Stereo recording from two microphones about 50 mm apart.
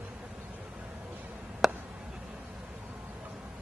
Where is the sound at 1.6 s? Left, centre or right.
Centre.